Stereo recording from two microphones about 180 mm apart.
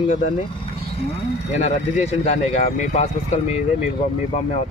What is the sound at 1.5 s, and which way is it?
Speech, 40° left (ahead or behind).